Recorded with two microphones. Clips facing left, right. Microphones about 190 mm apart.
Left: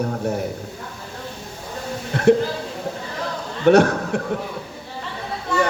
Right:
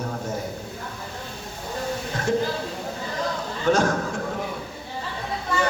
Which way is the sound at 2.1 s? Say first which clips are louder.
Left 13 dB; 65° left (ahead or behind).